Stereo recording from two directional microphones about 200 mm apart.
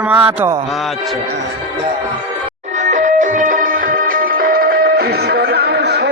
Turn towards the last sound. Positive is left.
turn(degrees=-55)  # may be behind; listen again after turning